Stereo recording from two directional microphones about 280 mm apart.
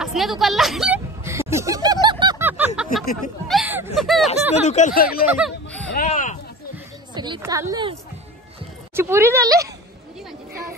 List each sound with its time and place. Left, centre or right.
0.0 s a sound: centre
3.4 s speech: centre
4.6 s speech: left
5.4 s a sound: centre
6.0 s speech: left
7.2 s speech: centre
8.9 s speech: centre